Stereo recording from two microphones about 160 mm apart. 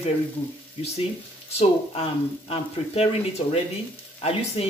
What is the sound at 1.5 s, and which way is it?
Speech, 40° left (ahead or behind).